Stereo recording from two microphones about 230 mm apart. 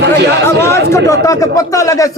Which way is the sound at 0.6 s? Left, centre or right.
Centre.